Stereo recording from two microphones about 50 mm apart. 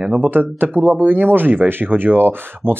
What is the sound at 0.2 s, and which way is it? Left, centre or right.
Speech, right.